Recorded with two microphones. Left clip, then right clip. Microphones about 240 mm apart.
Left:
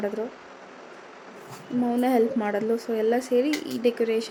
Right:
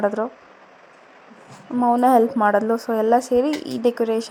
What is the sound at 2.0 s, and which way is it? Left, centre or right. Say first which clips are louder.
A woman's voice: right 7 dB; centre.